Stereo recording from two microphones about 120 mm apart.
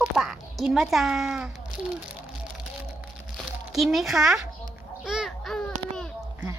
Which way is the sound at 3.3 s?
Centre (ahead or behind).